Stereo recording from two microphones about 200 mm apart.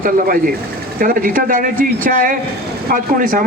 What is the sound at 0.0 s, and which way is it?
A man's voice, 45° right (ahead or behind).